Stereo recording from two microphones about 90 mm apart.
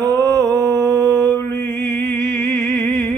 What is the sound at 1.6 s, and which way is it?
Music, 5° left (ahead or behind).